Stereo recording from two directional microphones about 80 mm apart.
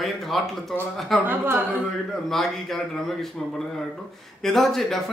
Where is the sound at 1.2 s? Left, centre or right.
Right.